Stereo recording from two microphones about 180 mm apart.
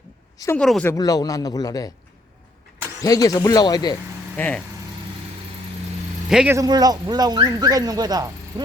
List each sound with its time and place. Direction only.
0.4 s a woman's voice: 5° left (ahead or behind)
0.9 s speech: 20° left (ahead or behind)
3.0 s speech: 20° left (ahead or behind)
4.4 s a woman's voice: 10° left (ahead or behind)
6.3 s speech: 5° right (ahead or behind)
6.6 s speech: 20° right (ahead or behind)